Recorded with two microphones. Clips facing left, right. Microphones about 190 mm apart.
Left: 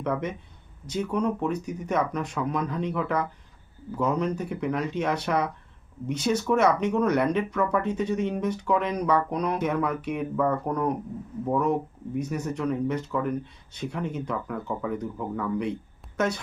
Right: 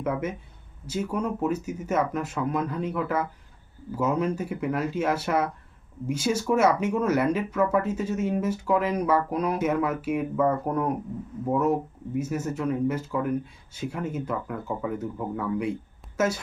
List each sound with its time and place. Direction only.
0.0 s speech: 5° right (ahead or behind)